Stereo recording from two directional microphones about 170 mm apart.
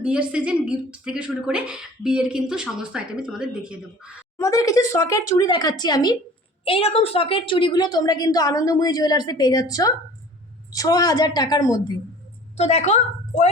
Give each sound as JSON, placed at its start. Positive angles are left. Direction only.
{"t": 0.0, "sound": "speech", "side_deg": -5}
{"t": 4.4, "sound": "a woman's voice", "side_deg": 20}
{"t": 6.7, "sound": "a woman's voice", "side_deg": 35}
{"t": 12.5, "sound": "a woman's voice", "side_deg": 40}